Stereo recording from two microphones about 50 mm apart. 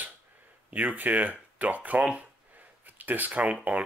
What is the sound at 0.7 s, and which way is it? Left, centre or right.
Speech, right.